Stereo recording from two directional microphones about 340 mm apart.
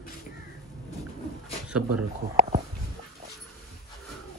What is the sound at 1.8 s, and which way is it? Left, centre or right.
Speech, right.